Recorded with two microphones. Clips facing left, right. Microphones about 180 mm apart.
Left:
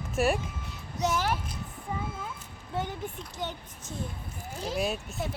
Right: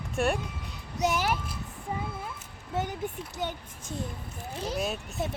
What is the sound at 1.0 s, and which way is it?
Speech, 15° right (ahead or behind).